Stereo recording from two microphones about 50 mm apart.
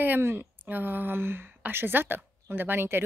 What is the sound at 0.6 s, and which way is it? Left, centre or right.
Speech, right.